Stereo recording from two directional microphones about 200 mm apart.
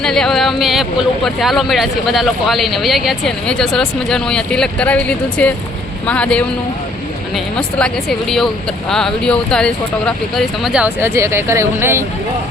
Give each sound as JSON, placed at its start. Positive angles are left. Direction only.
{"t": 0.0, "sound": "speech", "side_deg": 0}
{"t": 8.9, "sound": "speech", "side_deg": 5}